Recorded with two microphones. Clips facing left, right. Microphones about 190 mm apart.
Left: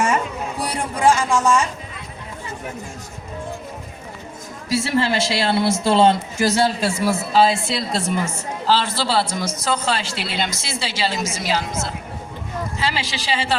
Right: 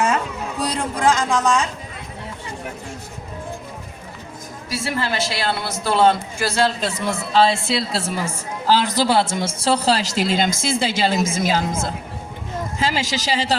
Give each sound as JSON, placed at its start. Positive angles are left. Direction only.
{"t": 0.6, "sound": "speech", "side_deg": 10}
{"t": 4.7, "sound": "a woman's voice", "side_deg": 25}
{"t": 6.6, "sound": "a man's voice", "side_deg": 10}
{"t": 8.6, "sound": "a man's voice", "side_deg": -15}
{"t": 12.8, "sound": "speech", "side_deg": -45}